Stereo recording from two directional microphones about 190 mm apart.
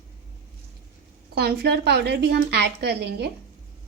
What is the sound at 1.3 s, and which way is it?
A woman's voice, 55° right (ahead or behind).